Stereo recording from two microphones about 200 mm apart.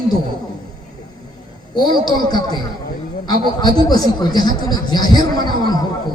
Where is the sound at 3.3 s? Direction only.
20° left (ahead or behind).